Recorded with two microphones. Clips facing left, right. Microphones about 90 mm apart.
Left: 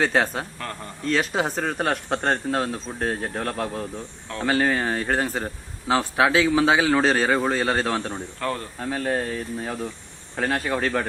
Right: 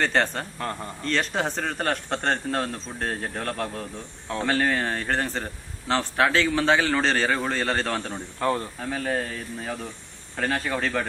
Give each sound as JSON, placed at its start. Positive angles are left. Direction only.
{"t": 0.0, "sound": "a man's voice", "side_deg": 5}
{"t": 8.4, "sound": "speech", "side_deg": -20}
{"t": 8.8, "sound": "speech", "side_deg": 5}